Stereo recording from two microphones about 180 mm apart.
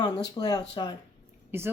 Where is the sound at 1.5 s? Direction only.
15° right (ahead or behind).